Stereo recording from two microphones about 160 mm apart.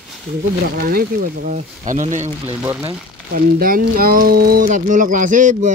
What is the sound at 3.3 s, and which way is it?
Speech, 65° right (ahead or behind).